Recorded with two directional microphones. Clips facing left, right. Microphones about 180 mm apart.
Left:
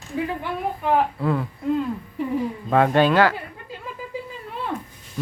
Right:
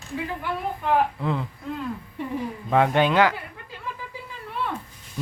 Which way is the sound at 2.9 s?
20° right (ahead or behind).